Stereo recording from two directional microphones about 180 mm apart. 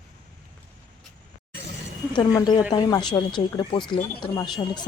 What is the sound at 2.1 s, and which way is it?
Speech, 25° left (ahead or behind).